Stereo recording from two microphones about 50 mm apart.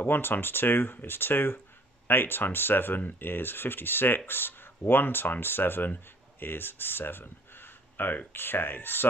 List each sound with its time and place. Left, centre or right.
0.0 s speech: left